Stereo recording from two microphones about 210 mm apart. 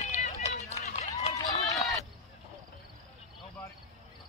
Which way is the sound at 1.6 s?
Centre (ahead or behind).